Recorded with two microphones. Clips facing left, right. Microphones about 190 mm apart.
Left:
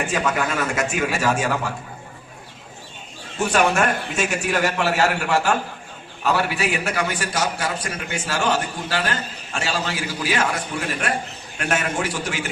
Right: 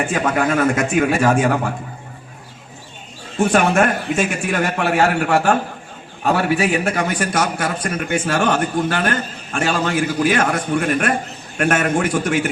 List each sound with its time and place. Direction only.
0.1 s a man's voice: 55° right (ahead or behind)
3.4 s a man's voice: 50° right (ahead or behind)